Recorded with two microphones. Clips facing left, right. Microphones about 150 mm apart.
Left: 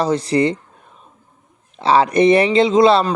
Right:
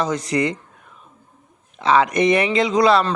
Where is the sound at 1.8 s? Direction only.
30° left (ahead or behind).